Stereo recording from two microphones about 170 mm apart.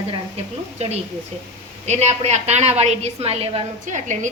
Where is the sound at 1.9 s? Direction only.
40° right (ahead or behind).